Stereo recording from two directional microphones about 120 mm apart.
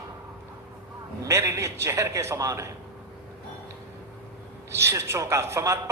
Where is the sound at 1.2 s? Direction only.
25° right (ahead or behind).